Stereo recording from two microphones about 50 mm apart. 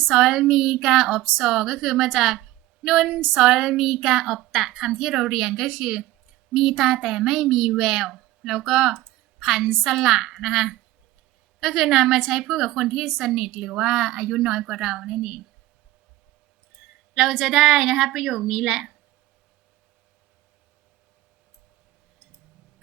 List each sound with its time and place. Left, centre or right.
0.1 s a woman's voice: centre
17.2 s a child's voice: centre